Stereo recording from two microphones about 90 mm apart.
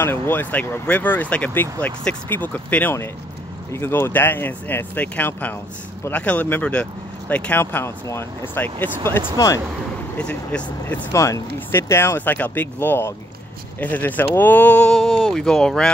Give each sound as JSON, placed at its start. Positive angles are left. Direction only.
{"t": 0.0, "sound": "speech", "side_deg": 25}
{"t": 10.1, "sound": "speech", "side_deg": 10}
{"t": 11.1, "sound": "speech", "side_deg": 35}
{"t": 15.0, "sound": "speech", "side_deg": 0}